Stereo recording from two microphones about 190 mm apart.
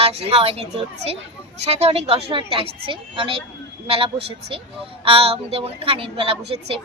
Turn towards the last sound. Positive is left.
turn(degrees=-30)  # may be behind; listen again after turning